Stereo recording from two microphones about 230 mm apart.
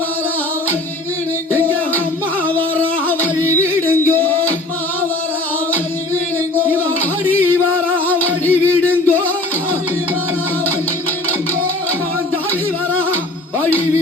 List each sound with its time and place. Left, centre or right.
2.6 s a sound: centre
3.4 s music: centre
8.0 s music: centre
13.6 s music: centre